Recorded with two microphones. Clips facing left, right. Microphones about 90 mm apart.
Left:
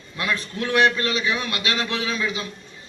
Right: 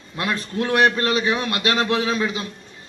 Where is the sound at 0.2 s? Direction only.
40° right (ahead or behind).